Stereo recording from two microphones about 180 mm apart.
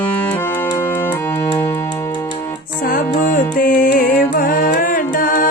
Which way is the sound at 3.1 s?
50° left (ahead or behind).